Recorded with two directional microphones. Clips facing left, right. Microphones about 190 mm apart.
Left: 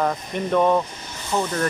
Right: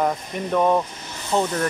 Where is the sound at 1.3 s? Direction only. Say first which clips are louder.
Right 2 dB; 20° right (ahead or behind).